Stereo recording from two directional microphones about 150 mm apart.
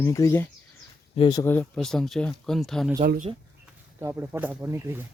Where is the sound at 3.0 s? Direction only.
75° right (ahead or behind).